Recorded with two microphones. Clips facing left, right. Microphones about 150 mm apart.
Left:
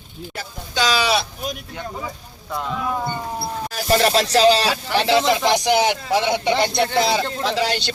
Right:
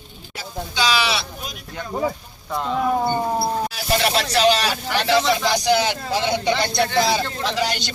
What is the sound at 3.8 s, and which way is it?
Speech, 40° left (ahead or behind).